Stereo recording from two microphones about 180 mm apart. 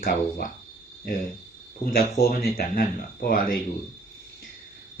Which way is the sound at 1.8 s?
55° left (ahead or behind).